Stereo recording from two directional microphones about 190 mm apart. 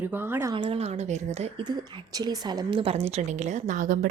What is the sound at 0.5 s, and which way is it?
A woman's voice, 30° right (ahead or behind).